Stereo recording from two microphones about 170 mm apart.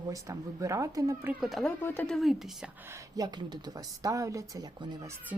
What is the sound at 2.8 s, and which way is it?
A woman's voice, 20° right (ahead or behind).